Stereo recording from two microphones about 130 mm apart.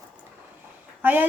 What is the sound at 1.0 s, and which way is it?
Speech, 15° right (ahead or behind).